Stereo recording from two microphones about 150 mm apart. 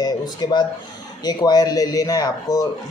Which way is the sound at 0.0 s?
30° left (ahead or behind).